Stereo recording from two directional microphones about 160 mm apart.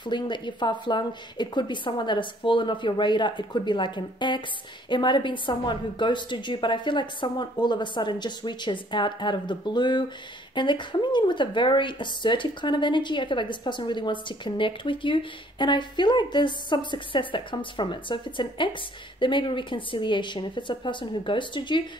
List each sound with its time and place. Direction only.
0.0 s a woman's voice: 30° left (ahead or behind)